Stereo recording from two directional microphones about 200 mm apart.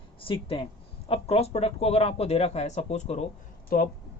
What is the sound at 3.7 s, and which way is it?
Speech, 45° left (ahead or behind).